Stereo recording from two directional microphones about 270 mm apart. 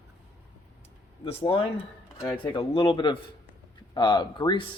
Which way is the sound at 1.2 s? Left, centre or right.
Left.